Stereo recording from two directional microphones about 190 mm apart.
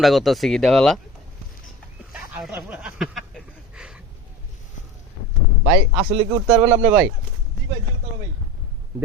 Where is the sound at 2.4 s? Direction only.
5° right (ahead or behind).